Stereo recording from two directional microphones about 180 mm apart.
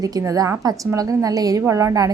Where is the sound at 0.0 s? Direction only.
20° right (ahead or behind).